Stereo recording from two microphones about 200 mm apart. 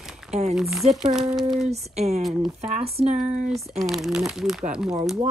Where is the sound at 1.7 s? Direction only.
35° right (ahead or behind).